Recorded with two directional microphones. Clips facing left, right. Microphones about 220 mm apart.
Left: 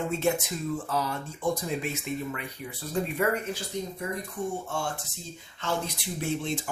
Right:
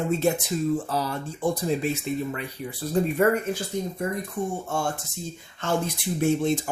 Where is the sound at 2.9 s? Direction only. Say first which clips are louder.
Right 6 dB; 45° right (ahead or behind).